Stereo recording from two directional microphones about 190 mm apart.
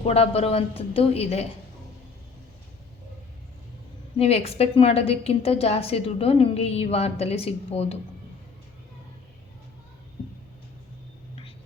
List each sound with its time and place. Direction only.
0.0 s a woman's voice: 30° left (ahead or behind)
4.2 s a woman's voice: 30° left (ahead or behind)